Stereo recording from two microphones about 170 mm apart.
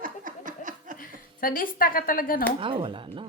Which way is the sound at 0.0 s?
50° right (ahead or behind).